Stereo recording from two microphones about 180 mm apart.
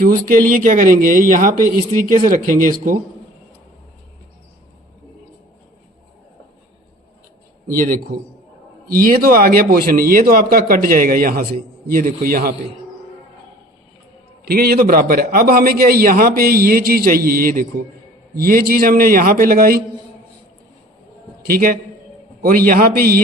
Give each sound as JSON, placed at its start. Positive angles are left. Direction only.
{"t": 0.0, "sound": "speech", "side_deg": -50}
{"t": 7.7, "sound": "speech", "side_deg": -50}
{"t": 14.4, "sound": "a man's voice", "side_deg": -60}
{"t": 21.4, "sound": "speech", "side_deg": -55}